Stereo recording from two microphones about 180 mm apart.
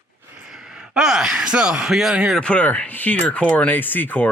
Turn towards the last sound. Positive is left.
turn(degrees=10)  # may be behind; listen again after turning